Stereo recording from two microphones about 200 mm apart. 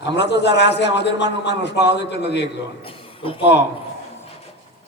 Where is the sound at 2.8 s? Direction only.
25° left (ahead or behind).